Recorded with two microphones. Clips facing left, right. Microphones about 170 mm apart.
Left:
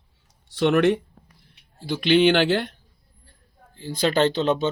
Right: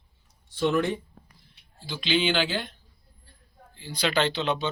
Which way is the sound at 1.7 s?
65° left (ahead or behind).